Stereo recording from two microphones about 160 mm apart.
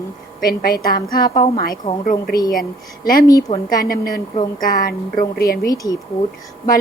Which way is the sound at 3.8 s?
65° left (ahead or behind).